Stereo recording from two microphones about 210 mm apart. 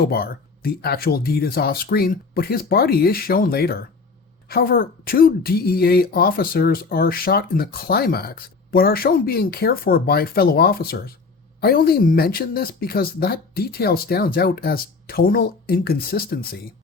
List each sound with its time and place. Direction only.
0.0 s a woman's voice: 45° left (ahead or behind)